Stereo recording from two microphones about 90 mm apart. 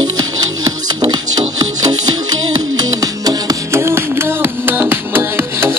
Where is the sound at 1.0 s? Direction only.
50° right (ahead or behind).